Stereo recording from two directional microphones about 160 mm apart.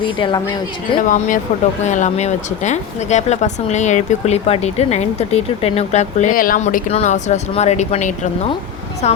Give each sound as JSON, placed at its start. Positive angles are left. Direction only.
{"t": 0.2, "sound": "a woman's voice", "side_deg": 30}
{"t": 1.0, "sound": "speech", "side_deg": 55}